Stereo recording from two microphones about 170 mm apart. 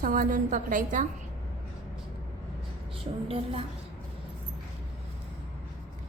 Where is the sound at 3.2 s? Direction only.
35° right (ahead or behind).